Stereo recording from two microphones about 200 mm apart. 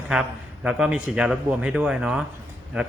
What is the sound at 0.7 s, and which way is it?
Speech, 5° right (ahead or behind).